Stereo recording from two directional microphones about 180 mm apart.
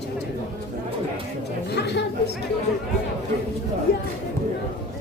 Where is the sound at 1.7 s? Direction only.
65° left (ahead or behind).